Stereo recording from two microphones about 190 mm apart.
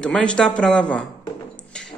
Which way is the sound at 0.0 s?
5° left (ahead or behind).